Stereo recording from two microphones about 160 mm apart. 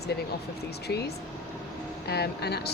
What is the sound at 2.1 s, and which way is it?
Speech, 90° left.